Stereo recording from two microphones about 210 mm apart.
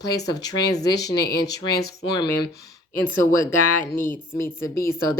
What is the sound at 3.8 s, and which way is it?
Speech, 40° left (ahead or behind).